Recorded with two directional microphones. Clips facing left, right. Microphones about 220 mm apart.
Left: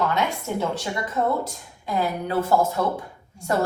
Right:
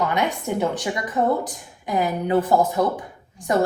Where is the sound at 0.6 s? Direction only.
15° right (ahead or behind).